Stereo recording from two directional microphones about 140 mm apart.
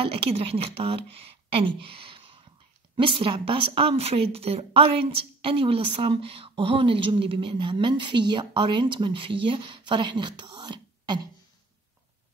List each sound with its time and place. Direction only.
0.0 s speech: 40° right (ahead or behind)
1.1 s a sound: 40° right (ahead or behind)
3.0 s speech: 40° right (ahead or behind)